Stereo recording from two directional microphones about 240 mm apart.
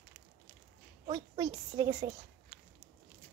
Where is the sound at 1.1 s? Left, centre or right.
Centre.